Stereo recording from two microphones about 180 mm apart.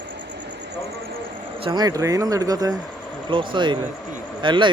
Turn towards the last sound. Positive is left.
turn(degrees=-25)  # may be behind; listen again after turning